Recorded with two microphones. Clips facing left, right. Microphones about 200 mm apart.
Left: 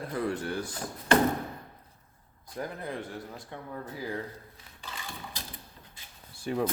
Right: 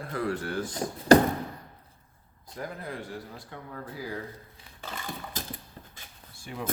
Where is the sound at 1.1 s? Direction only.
40° right (ahead or behind).